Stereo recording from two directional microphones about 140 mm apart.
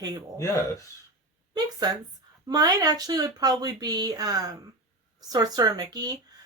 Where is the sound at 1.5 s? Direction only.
30° right (ahead or behind).